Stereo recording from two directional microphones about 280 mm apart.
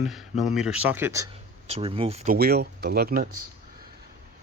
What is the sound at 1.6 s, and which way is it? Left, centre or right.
Speech, right.